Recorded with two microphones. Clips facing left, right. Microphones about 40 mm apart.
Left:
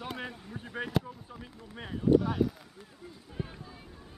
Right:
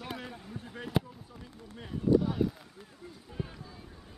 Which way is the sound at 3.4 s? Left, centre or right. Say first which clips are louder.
Even; centre.